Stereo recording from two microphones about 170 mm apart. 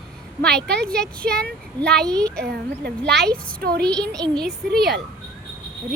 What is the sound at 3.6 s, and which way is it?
Speech, 65° right (ahead or behind).